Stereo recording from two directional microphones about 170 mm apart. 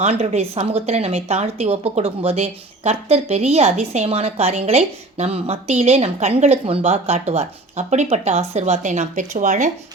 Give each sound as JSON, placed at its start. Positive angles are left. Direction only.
{"t": 0.0, "sound": "speech", "side_deg": -40}